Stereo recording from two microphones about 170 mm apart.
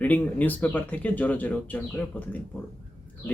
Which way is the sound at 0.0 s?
10° left (ahead or behind).